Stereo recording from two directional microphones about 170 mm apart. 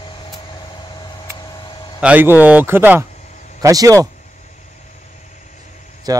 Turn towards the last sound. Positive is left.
turn(degrees=-20)  # may be behind; listen again after turning